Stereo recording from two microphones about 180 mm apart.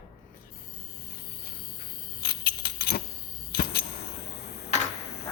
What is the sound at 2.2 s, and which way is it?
Keys jangling, 60° left (ahead or behind).